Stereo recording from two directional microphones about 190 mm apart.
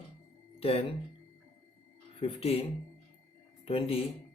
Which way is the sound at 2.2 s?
30° left (ahead or behind).